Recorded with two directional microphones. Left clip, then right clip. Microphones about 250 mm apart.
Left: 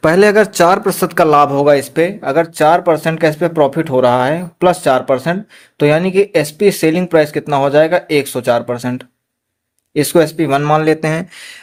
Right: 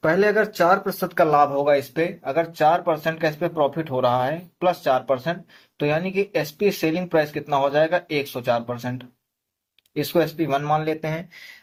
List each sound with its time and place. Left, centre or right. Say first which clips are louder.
0.0 s speech: left 9 dB; left